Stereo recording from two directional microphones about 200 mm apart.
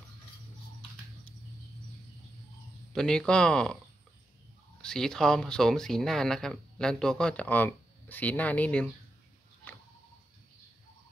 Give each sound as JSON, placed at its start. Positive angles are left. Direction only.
{"t": 2.9, "sound": "speech", "side_deg": 5}
{"t": 4.8, "sound": "speech", "side_deg": 5}